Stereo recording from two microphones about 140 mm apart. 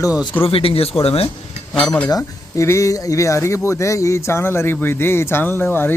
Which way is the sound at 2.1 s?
20° left (ahead or behind).